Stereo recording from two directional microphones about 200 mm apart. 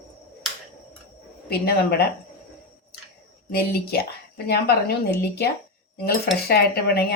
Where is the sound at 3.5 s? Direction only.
50° left (ahead or behind).